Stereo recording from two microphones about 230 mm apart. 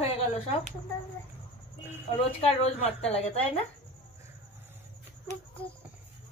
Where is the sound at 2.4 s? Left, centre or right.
Left.